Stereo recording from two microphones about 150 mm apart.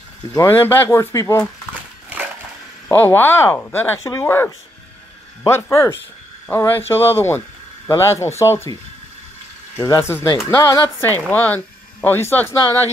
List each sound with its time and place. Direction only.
0.3 s speech: 15° left (ahead or behind)
2.9 s speech: 15° left (ahead or behind)
5.5 s speech: 20° left (ahead or behind)
9.8 s speech: 20° left (ahead or behind)